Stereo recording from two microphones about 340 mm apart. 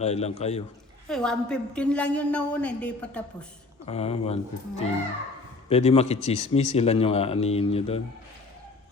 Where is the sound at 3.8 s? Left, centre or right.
Centre.